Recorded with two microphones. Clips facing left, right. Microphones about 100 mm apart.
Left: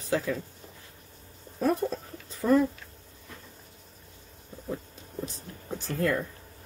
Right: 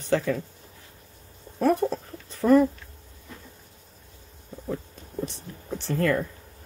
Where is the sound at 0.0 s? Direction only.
85° right.